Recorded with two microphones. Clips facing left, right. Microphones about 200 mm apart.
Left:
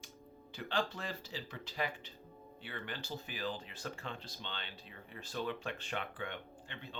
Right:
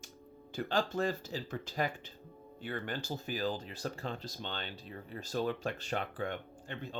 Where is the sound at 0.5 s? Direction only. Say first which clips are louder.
Right 5 dB; 45° right (ahead or behind).